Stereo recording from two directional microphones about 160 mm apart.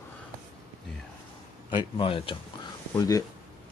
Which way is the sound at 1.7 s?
35° left (ahead or behind).